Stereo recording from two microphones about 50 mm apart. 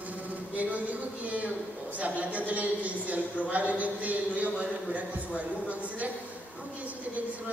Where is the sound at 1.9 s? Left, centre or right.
Right.